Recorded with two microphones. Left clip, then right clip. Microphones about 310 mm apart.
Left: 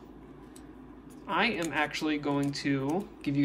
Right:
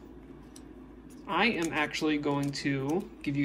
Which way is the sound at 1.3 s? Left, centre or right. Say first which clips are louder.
Right 1 dB; centre.